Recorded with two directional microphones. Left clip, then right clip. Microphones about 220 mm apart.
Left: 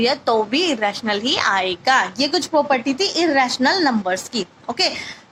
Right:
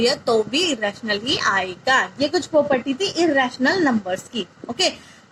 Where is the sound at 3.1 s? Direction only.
45° left (ahead or behind).